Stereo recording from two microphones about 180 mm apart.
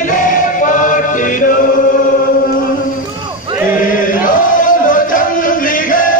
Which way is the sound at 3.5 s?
10° right (ahead or behind).